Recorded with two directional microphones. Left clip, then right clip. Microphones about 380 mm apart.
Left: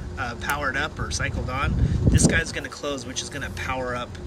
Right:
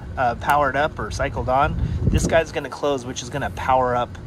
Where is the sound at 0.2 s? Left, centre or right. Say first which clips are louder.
Right 9 dB; centre.